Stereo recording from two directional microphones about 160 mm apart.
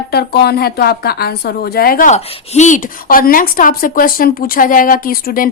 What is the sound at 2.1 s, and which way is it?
A woman's voice, 45° left (ahead or behind).